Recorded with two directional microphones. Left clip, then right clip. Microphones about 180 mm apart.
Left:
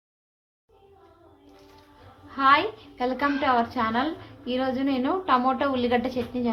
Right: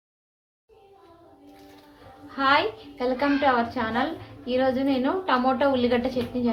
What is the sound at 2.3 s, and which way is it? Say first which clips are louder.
A woman's voice: left 1 dB; 35° left (ahead or behind).